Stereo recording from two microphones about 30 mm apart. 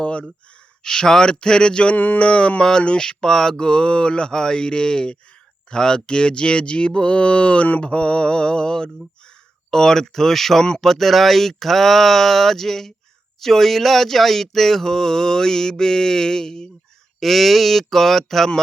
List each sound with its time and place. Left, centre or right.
0.0 s a sound: left
0.9 s mantra: left
2.1 s speech: left
3.0 s mantra: left
5.7 s speech: left
7.8 s mantra: left
9.7 s speech: centre
17.2 s speech: centre